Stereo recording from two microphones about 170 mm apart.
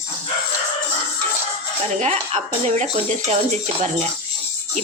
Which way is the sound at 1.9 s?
40° right (ahead or behind).